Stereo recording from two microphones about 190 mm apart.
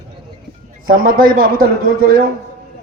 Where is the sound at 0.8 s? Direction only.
50° right (ahead or behind).